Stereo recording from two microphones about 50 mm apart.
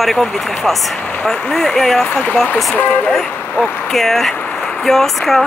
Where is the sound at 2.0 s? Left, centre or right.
Left.